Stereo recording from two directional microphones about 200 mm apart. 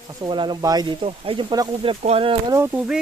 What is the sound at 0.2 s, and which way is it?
Speech, 20° right (ahead or behind).